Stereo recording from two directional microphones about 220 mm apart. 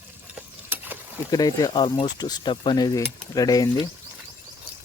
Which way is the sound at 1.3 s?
15° left (ahead or behind).